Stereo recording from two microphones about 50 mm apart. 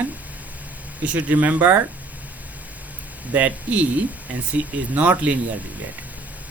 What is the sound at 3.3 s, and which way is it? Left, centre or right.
Speech, right.